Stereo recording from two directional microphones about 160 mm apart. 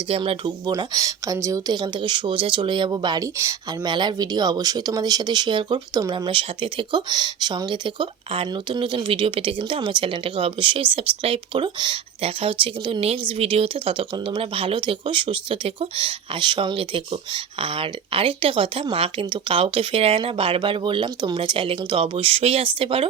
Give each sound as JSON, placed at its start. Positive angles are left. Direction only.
{"t": 0.1, "sound": "speech", "side_deg": -35}
{"t": 0.7, "sound": "speech", "side_deg": -20}